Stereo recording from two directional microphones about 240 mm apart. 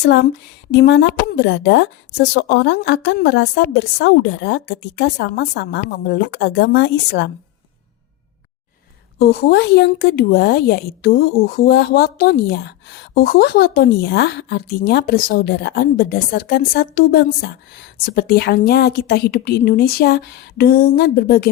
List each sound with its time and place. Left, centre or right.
0.0 s a woman's voice: left
9.1 s a woman's voice: left